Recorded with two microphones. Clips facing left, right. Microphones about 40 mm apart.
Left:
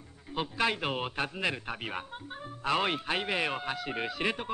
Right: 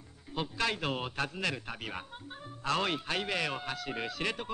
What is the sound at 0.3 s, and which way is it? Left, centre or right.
A man's voice, centre.